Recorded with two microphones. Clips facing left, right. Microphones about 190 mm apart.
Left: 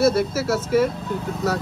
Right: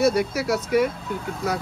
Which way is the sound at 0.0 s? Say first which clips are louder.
Left 2 dB; 15° right (ahead or behind).